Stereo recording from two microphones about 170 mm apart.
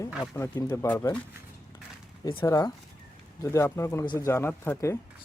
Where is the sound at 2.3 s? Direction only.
20° left (ahead or behind).